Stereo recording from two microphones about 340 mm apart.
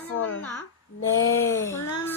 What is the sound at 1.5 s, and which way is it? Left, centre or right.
Speech, centre.